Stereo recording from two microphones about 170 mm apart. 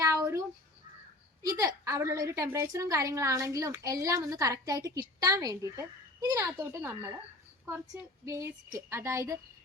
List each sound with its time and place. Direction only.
0.0 s a sound: 20° right (ahead or behind)
1.5 s a woman's voice: 20° right (ahead or behind)
8.2 s speech: 15° right (ahead or behind)